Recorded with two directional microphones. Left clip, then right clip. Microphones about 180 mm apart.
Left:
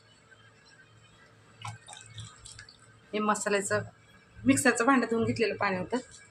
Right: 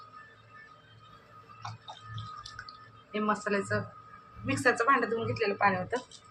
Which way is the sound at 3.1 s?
70° left (ahead or behind).